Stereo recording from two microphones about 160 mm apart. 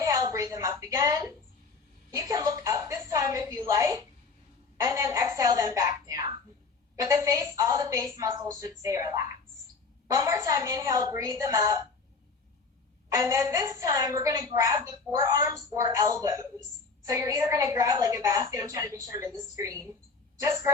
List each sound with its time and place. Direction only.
0.0 s a sound: 20° right (ahead or behind)
2.1 s a woman's voice: 20° right (ahead or behind)
13.1 s a woman's voice: 20° right (ahead or behind)